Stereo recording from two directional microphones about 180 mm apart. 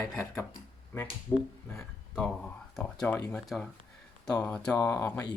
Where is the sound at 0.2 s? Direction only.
15° left (ahead or behind).